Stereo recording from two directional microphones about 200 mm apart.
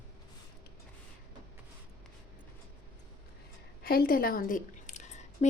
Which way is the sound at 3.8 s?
50° left (ahead or behind).